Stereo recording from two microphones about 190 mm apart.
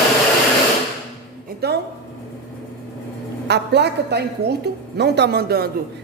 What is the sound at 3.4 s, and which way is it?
A woman's voice, 60° right (ahead or behind).